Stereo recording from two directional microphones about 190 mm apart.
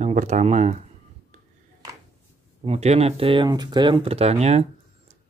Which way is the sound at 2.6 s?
35° right (ahead or behind).